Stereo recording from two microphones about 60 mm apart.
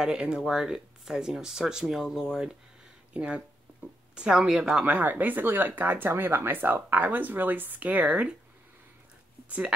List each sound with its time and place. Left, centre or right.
0.0 s speech: centre
3.1 s speech: centre
4.9 s speech: right